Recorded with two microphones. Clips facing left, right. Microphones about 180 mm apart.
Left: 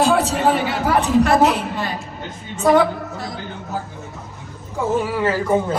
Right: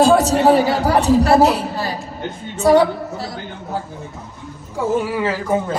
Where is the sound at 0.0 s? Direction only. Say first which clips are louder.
Right 4 dB; 40° right (ahead or behind).